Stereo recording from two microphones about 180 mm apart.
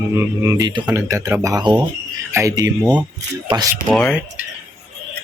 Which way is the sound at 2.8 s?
5° right (ahead or behind).